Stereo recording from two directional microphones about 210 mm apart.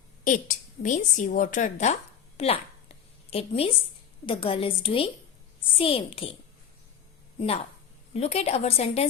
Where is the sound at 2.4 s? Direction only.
30° left (ahead or behind).